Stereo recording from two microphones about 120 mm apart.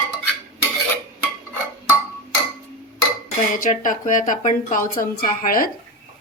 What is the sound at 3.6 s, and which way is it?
Speech, 90° left.